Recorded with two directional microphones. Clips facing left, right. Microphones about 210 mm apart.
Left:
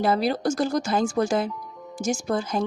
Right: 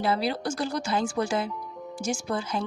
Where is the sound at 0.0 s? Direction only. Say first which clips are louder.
Left 4 dB; 45° left (ahead or behind).